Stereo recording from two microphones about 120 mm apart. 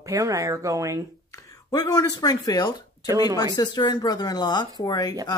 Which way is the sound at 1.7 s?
30° left (ahead or behind).